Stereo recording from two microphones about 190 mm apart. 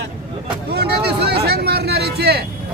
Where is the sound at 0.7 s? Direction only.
60° right (ahead or behind).